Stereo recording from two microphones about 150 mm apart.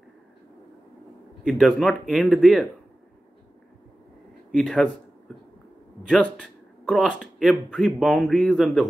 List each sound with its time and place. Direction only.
1.4 s speech: centre (ahead or behind)
4.6 s speech: 5° left (ahead or behind)
6.0 s speech: 5° left (ahead or behind)